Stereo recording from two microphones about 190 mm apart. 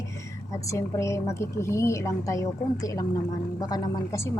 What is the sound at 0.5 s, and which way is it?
A woman's voice, 15° left (ahead or behind).